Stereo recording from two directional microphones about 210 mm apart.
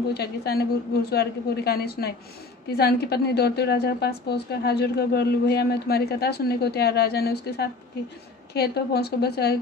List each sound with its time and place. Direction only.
0.1 s a woman's voice: 50° left (ahead or behind)